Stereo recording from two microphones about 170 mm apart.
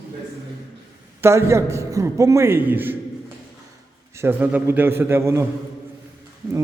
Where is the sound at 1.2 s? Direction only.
15° right (ahead or behind).